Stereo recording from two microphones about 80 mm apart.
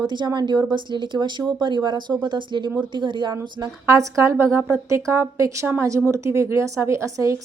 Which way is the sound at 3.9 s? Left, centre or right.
Right.